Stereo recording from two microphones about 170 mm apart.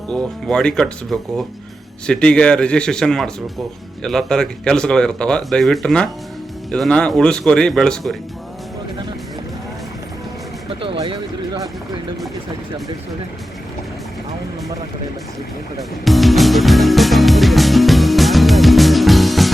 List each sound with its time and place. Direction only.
0.1 s speech: 5° left (ahead or behind)
10.7 s a sound: 30° right (ahead or behind)
15.8 s music: centre (ahead or behind)